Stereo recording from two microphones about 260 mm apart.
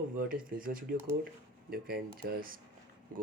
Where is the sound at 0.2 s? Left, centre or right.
Right.